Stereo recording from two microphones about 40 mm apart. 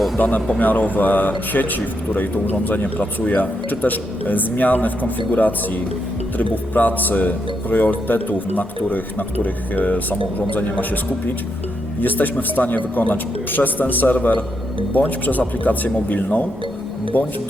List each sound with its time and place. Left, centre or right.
0.2 s speech: left